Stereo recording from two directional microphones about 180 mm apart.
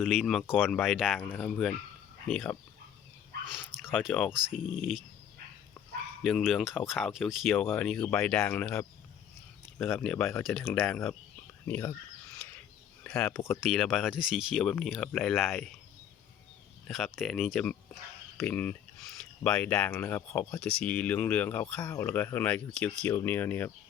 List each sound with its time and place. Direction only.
0.0 s speech: centre (ahead or behind)
3.8 s speech: centre (ahead or behind)
6.2 s speech: centre (ahead or behind)
11.7 s speech: 15° left (ahead or behind)
12.4 s a sound: 5° left (ahead or behind)
13.1 s speech: 5° left (ahead or behind)
13.5 s speech: centre (ahead or behind)
16.9 s speech: centre (ahead or behind)